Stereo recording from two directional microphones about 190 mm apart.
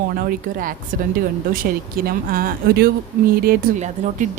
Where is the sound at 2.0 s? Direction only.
50° right (ahead or behind).